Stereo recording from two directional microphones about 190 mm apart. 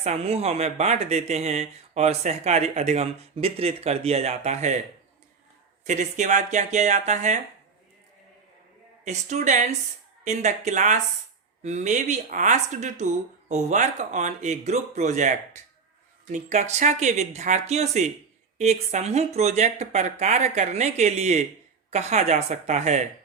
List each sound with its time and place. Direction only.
0.0 s speech: 35° right (ahead or behind)
5.8 s speech: 40° right (ahead or behind)
9.0 s speech: 40° right (ahead or behind)
16.3 s speech: 40° right (ahead or behind)